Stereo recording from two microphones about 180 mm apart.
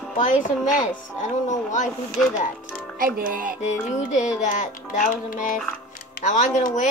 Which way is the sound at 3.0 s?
50° right (ahead or behind).